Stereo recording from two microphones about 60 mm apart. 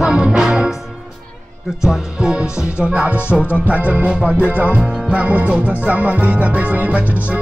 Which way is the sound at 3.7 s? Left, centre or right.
Right.